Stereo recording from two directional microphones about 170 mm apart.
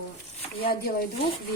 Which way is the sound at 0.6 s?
60° left (ahead or behind).